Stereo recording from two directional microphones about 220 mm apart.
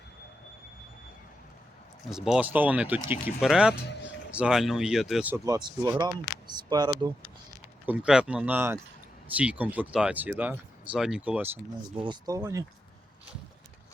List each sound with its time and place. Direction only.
2.0 s speech: centre (ahead or behind); by 7.1 s 20° right (ahead or behind)
7.9 s speech: 5° right (ahead or behind)
12.0 s speech: 20° right (ahead or behind)